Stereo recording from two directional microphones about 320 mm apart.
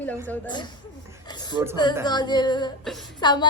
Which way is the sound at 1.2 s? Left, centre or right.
Centre.